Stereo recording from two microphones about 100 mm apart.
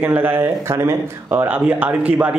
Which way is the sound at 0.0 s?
20° right (ahead or behind).